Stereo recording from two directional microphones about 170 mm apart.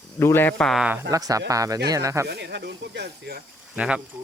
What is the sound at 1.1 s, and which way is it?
Speech, 20° right (ahead or behind).